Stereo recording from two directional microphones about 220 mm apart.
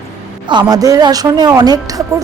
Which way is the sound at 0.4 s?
20° right (ahead or behind).